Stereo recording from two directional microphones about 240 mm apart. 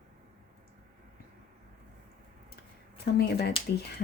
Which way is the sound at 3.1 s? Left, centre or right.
Left.